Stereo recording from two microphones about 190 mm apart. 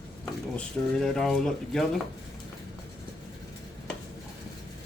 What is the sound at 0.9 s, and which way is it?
Speech, 5° left (ahead or behind).